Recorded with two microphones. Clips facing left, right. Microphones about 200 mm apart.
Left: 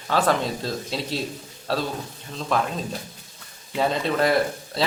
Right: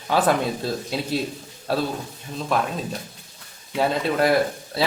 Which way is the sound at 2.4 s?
Centre (ahead or behind).